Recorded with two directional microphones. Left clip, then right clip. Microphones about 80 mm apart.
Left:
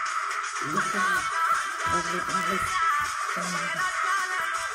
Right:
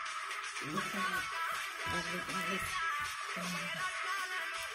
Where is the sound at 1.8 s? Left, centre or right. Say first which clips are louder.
Left 11 dB; left.